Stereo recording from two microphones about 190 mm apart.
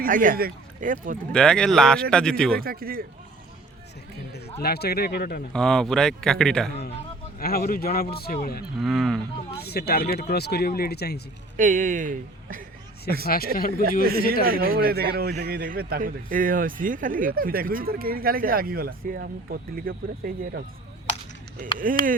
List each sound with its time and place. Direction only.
0.0 s a man's voice: 45° right (ahead or behind)
1.3 s speech: 5° left (ahead or behind)
2.6 s a man's voice: 50° right (ahead or behind)
4.6 s speech: 55° left (ahead or behind)
5.5 s speech: centre (ahead or behind)
7.3 s a man's voice: 50° left (ahead or behind)
8.8 s speech: centre (ahead or behind)
9.6 s speech: 55° left (ahead or behind)
11.5 s speech: 40° right (ahead or behind)
13.2 s a man's voice: 50° left (ahead or behind)
14.0 s a man's voice: 55° right (ahead or behind)
21.8 s a man's voice: 45° right (ahead or behind)